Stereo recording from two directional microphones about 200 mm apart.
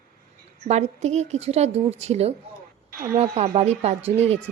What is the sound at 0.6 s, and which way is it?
A woman's voice, 35° right (ahead or behind).